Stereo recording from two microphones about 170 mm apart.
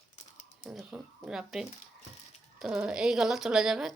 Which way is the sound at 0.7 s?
5° right (ahead or behind).